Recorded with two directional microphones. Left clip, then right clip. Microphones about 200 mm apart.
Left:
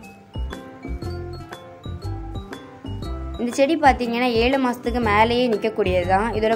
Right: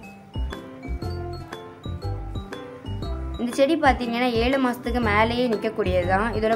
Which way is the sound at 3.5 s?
10° left (ahead or behind).